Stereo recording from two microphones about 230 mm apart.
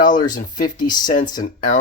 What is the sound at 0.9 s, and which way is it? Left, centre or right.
Speech, centre.